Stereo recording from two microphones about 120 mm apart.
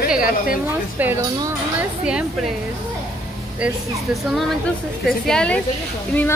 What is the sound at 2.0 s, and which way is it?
Speech, 10° right (ahead or behind).